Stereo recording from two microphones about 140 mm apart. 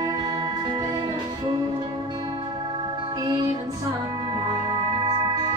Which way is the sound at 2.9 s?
30° right (ahead or behind).